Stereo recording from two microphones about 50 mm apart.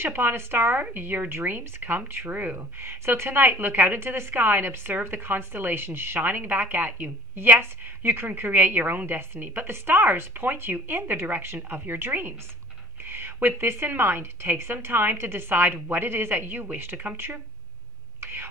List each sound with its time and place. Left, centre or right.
0.0 s a woman's voice: right
2.8 s a woman's voice: right
18.2 s whispering: right